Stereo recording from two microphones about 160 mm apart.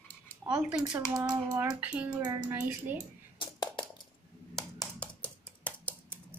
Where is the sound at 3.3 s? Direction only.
30° left (ahead or behind).